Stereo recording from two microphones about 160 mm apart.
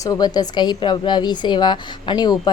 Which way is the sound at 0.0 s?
25° left (ahead or behind).